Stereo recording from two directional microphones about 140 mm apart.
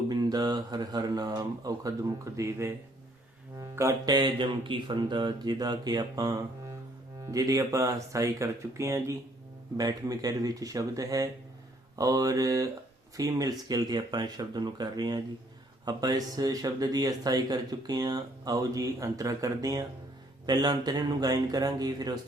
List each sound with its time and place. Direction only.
0.1 s speech: 30° right (ahead or behind)